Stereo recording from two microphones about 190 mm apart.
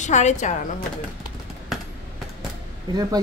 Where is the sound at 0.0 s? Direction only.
35° left (ahead or behind).